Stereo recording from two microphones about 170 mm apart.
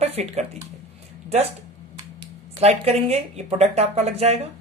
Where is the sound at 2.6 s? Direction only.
40° right (ahead or behind).